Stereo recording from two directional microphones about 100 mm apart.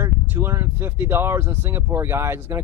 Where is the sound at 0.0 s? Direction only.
25° right (ahead or behind).